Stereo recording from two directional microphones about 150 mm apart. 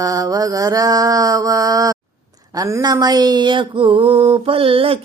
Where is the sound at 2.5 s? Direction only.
20° right (ahead or behind).